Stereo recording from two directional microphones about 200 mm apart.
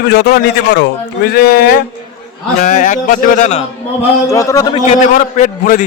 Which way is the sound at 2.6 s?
40° left (ahead or behind).